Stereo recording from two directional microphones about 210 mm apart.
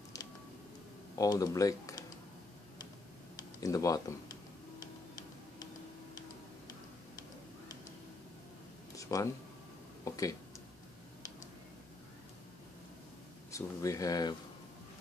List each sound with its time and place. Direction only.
1.1 s speech: 15° left (ahead or behind)
3.6 s speech: 15° left (ahead or behind)
8.9 s a sound: 15° left (ahead or behind)
13.5 s speech: 15° left (ahead or behind)